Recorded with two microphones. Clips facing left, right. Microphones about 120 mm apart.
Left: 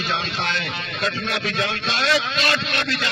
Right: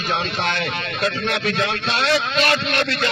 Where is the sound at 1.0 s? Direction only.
60° right (ahead or behind).